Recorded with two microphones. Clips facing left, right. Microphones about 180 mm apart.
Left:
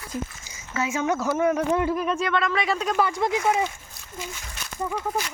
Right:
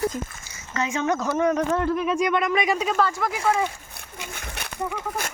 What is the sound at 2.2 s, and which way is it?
Speech, 15° right (ahead or behind).